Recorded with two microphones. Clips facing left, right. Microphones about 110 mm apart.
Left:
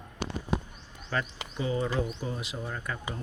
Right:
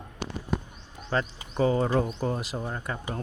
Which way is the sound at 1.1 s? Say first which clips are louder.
Right 4 dB; 30° right (ahead or behind).